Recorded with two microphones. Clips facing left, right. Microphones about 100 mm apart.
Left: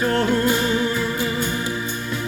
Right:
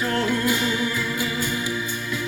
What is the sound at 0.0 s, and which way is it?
Music, 30° left (ahead or behind).